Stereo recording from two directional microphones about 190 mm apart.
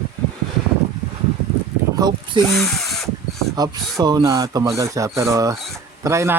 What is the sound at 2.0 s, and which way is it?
Speech, 20° right (ahead or behind).